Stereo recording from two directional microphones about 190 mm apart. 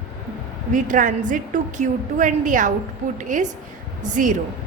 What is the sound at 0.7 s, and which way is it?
A woman's voice, 45° right (ahead or behind).